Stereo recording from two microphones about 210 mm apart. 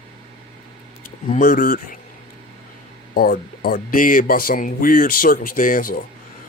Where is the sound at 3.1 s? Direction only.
45° left (ahead or behind).